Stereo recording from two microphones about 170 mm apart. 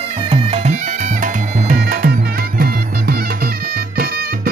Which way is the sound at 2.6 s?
65° right (ahead or behind).